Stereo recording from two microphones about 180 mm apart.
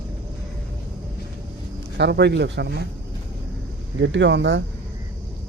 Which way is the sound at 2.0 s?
70° right (ahead or behind).